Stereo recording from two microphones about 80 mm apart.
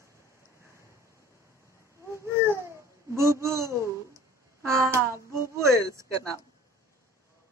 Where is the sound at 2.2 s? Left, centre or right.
Right.